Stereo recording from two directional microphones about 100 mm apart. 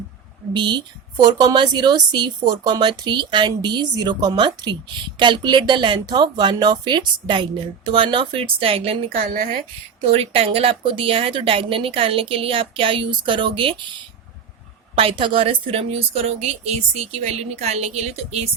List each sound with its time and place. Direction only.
0.5 s a woman's voice: 50° right (ahead or behind); by 9.0 s 75° right (ahead or behind)
10.1 s a woman's voice: 75° right (ahead or behind); by 13.7 s 55° right (ahead or behind)
15.2 s a woman's voice: 60° right (ahead or behind)
15.7 s speech: 85° right